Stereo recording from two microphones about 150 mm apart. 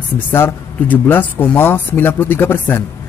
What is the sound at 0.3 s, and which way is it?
A man's voice, 15° left (ahead or behind).